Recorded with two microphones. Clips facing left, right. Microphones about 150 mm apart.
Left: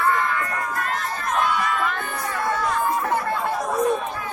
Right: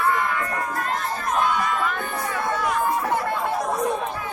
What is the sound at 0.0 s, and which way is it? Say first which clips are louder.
Crowd: left 1 dB; 15° right (ahead or behind).